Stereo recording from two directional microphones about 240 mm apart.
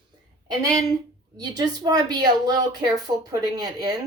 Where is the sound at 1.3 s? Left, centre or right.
Centre.